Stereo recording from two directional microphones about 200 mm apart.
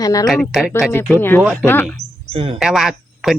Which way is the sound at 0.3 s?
Centre (ahead or behind).